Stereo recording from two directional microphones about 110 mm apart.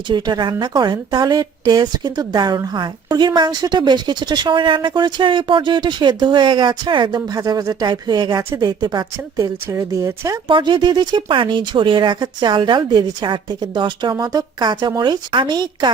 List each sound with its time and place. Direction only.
0.1 s a woman's voice: 45° right (ahead or behind)
9.6 s speech: 30° right (ahead or behind)
10.5 s speech: 45° right (ahead or behind)